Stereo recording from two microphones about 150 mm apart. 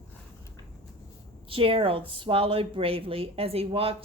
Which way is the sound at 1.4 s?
35° right (ahead or behind).